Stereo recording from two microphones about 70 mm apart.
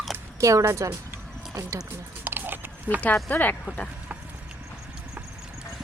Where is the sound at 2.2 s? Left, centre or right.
Right.